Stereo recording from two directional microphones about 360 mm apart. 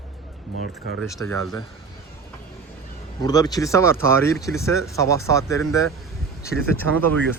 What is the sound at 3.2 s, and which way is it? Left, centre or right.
Speech, centre.